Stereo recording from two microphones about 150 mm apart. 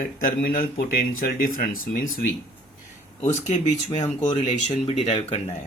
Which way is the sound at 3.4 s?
50° left (ahead or behind).